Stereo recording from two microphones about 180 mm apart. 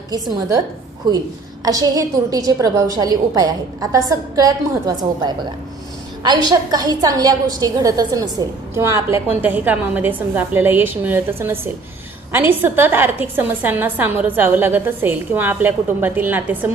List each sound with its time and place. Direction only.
0.1 s a woman's voice: 20° right (ahead or behind)
1.6 s a woman's voice: 20° right (ahead or behind)